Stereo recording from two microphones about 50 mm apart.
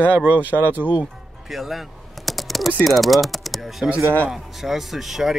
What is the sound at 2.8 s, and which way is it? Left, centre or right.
Speech, centre.